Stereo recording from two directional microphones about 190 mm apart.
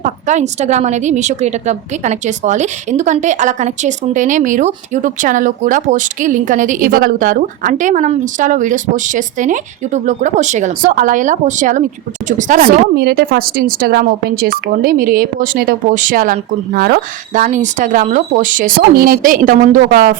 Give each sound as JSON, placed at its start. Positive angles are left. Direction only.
{"t": 0.0, "sound": "a woman's voice", "side_deg": -40}